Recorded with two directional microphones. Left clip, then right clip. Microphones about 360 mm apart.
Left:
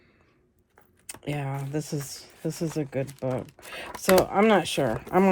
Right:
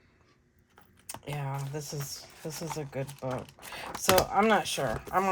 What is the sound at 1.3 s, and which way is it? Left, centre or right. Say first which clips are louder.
Speech: left 5 dB; left.